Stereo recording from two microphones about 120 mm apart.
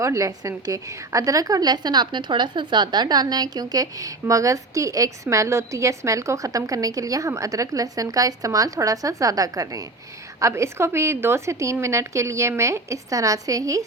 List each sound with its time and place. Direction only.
0.0 s a woman's voice: 30° right (ahead or behind)